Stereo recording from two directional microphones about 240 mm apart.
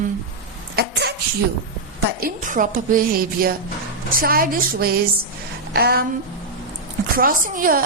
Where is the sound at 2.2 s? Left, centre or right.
Right.